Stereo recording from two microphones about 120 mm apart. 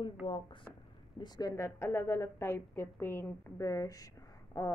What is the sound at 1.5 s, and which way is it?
A woman's voice, 25° left (ahead or behind).